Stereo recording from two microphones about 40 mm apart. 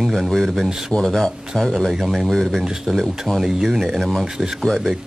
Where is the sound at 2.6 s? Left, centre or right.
Centre.